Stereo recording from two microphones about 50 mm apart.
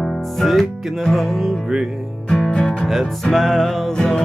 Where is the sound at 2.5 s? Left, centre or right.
Centre.